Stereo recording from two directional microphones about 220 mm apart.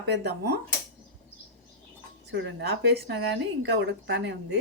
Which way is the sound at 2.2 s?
50° right (ahead or behind).